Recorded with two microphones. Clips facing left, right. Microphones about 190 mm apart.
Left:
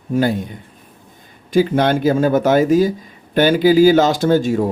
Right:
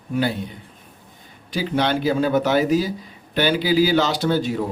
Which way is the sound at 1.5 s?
50° left (ahead or behind).